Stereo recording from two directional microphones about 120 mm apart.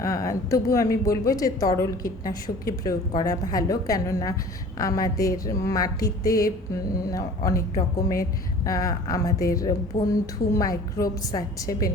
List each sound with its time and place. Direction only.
0.0 s a woman's voice: 25° left (ahead or behind)